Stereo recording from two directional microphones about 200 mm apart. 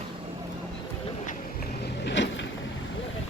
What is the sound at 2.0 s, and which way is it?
Vehicle, 65° left (ahead or behind).